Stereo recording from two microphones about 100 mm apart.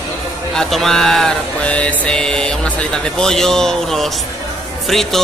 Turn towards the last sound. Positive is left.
turn(degrees=0)  # may be behind; listen again after turning